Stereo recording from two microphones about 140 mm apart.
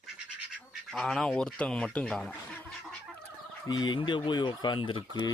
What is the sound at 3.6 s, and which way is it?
Speech, 30° left (ahead or behind).